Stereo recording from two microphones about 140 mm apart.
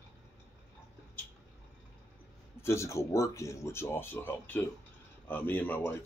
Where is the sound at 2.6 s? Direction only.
20° left (ahead or behind).